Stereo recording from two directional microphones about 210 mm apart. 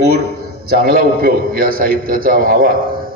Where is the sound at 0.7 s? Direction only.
45° right (ahead or behind).